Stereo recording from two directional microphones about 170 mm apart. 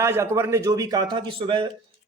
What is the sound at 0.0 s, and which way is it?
Speech, 15° right (ahead or behind).